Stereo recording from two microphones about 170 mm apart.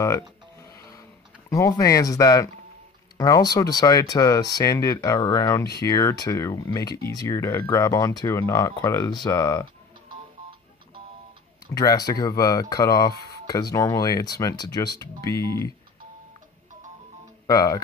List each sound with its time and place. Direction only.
0.0 s a sound: 15° left (ahead or behind)
1.5 s speech: 20° left (ahead or behind)
11.7 s speech: 20° left (ahead or behind)
17.5 s speech: 20° left (ahead or behind)